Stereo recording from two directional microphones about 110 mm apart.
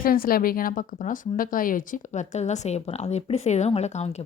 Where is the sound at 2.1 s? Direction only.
90° left; by 4.3 s 75° left (ahead or behind).